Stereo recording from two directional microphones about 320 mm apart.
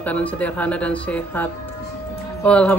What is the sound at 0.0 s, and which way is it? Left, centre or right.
Speech, centre.